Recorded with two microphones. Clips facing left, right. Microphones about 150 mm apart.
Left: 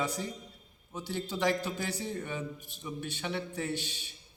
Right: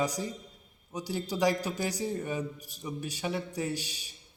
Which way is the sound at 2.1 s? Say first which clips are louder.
Right 4 dB; 5° right (ahead or behind).